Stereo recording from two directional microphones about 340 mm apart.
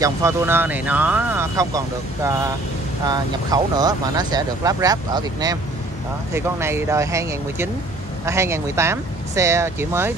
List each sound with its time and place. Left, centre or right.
0.0 s speech: centre